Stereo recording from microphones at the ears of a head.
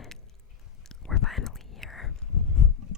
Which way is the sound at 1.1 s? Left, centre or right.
Left.